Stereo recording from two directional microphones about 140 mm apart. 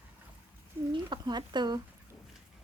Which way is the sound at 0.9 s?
30° right (ahead or behind).